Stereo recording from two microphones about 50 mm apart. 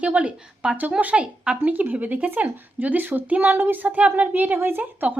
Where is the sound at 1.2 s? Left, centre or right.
Centre.